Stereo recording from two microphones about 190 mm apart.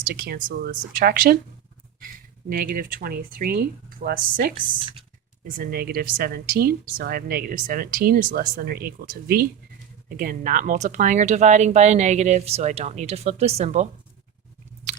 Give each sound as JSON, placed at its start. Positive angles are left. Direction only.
{"t": 0.1, "sound": "speech", "side_deg": -55}
{"t": 2.5, "sound": "speech", "side_deg": -50}